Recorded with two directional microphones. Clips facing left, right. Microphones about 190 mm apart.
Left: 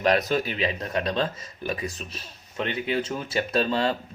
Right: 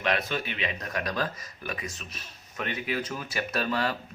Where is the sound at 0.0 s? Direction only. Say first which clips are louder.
Left 6 dB; 40° left (ahead or behind).